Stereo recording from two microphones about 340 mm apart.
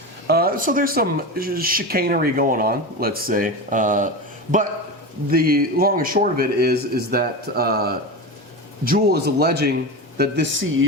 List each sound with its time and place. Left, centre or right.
0.3 s speech: right
5.3 s speech: right